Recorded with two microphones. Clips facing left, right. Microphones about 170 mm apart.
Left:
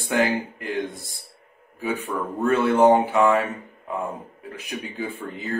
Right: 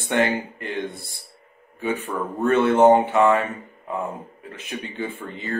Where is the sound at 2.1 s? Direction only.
10° right (ahead or behind).